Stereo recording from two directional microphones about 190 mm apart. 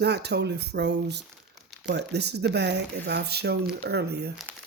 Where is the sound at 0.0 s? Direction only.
60° right (ahead or behind).